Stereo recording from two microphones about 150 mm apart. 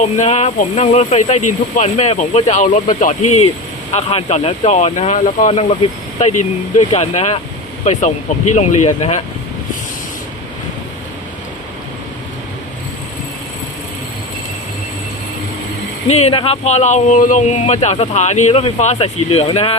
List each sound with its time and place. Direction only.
0.0 s speech: 50° left (ahead or behind)
3.9 s speech: 45° left (ahead or behind)
7.9 s speech: 55° left (ahead or behind)
8.5 s speech: 45° left (ahead or behind)
16.0 s speech: 45° left (ahead or behind)